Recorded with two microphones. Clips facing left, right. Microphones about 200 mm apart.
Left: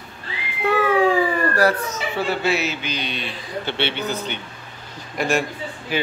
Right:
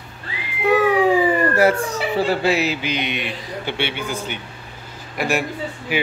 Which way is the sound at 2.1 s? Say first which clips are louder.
Right 4 dB; 35° right (ahead or behind).